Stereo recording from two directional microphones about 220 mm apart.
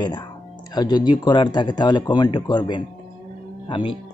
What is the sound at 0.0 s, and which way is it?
Speech, 20° left (ahead or behind).